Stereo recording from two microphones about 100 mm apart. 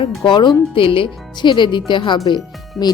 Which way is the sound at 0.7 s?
60° left (ahead or behind).